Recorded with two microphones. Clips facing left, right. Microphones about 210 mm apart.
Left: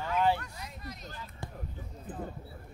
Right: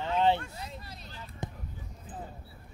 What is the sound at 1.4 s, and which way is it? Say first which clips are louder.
Basketball bounce: right 5 dB; 20° right (ahead or behind).